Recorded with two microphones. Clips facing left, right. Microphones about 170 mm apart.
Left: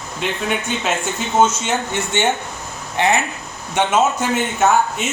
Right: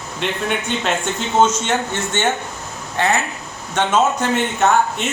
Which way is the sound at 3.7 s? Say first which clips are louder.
Even; 5° left (ahead or behind).